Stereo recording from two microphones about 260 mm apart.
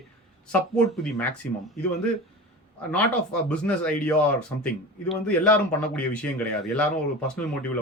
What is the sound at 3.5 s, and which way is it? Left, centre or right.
Speech, centre.